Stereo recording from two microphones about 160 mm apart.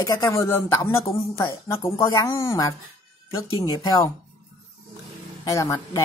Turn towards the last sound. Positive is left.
turn(degrees=20)  # may be behind; listen again after turning